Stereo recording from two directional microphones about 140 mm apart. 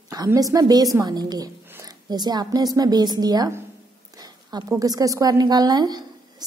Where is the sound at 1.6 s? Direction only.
15° right (ahead or behind).